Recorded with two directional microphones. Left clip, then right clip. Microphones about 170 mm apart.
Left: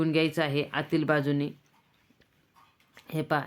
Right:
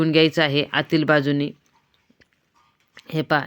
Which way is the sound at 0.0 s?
30° right (ahead or behind).